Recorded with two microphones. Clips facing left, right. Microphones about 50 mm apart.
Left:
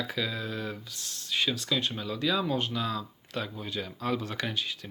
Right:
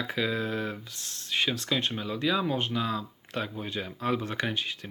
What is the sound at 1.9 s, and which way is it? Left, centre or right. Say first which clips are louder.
Speech: right 1 dB; right.